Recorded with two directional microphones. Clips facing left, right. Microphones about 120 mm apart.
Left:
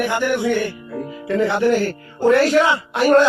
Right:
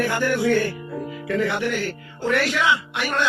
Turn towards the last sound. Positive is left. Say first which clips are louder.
# left 10 dB
turn(degrees=40)  # may be behind; listen again after turning